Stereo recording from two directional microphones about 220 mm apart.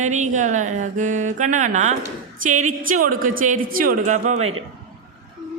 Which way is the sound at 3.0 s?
40° right (ahead or behind).